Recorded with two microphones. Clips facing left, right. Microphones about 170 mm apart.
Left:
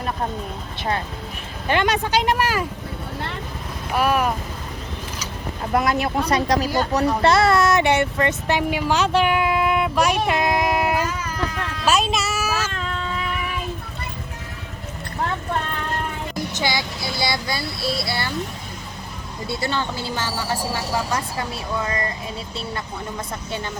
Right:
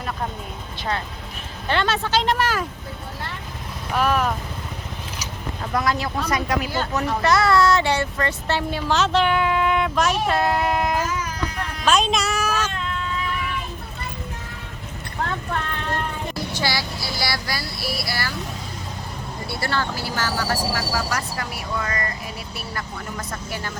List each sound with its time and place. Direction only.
1.6 s speech: 15° left (ahead or behind)
3.9 s speech: 10° left (ahead or behind)
5.7 s speech: 25° left (ahead or behind); by 10.2 s 10° left (ahead or behind)
10.2 s a sound: 10° left (ahead or behind)
11.9 s speech: 5° left (ahead or behind)
16.3 s speech: 20° left (ahead or behind)
19.5 s speech: 20° left (ahead or behind)